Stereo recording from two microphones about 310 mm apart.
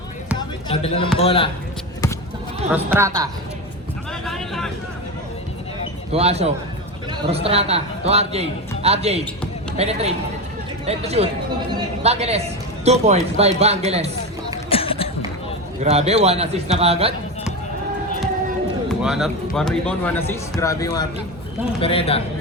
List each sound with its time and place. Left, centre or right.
0.7 s speech: centre
2.7 s a woman's voice: centre
4.3 s vehicle: centre
6.1 s a man's voice: centre
14.7 s music: centre
15.8 s a man's voice: right
18.9 s speech: centre